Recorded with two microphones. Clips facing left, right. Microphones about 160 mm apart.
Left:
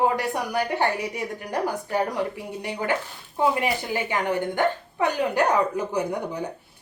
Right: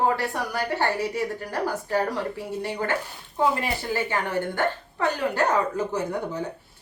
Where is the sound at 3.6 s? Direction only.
15° left (ahead or behind).